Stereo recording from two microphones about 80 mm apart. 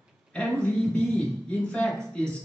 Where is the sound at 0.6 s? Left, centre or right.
Centre.